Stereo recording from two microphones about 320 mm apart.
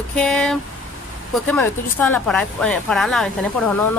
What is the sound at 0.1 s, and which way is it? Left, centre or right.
A woman's voice, centre.